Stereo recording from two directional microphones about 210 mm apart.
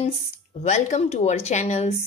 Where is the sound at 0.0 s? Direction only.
30° left (ahead or behind).